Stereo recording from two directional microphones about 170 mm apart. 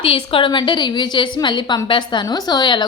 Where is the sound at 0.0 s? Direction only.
35° left (ahead or behind).